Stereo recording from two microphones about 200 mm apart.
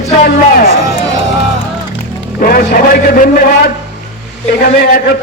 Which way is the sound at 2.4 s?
50° left (ahead or behind).